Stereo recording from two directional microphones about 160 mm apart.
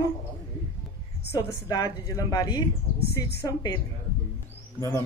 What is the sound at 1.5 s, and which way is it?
A woman's voice, 25° left (ahead or behind).